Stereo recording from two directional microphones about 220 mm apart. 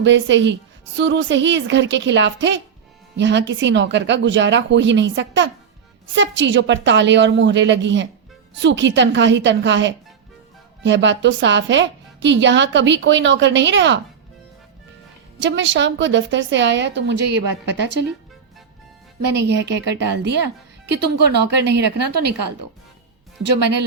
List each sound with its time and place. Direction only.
0.0 s a woman's voice: 55° right (ahead or behind)
15.4 s a woman's voice: 55° right (ahead or behind)
19.2 s a woman's voice: 50° right (ahead or behind)